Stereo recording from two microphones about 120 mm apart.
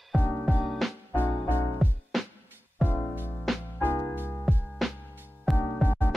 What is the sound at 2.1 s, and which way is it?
Music, centre (ahead or behind).